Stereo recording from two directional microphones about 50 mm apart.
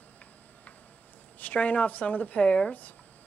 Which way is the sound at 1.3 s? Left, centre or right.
Left.